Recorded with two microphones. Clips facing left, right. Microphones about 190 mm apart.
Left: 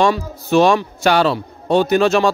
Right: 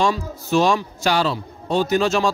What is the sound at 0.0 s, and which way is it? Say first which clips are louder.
A man's voice: left 4 dB; 60° left (ahead or behind).